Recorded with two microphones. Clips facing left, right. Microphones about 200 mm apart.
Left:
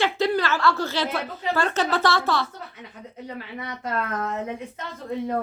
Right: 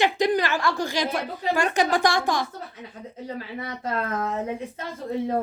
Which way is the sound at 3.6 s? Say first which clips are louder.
Even; 30° right (ahead or behind).